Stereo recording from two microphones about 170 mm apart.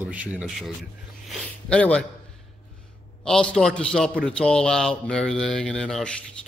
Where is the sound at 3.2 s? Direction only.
5° left (ahead or behind).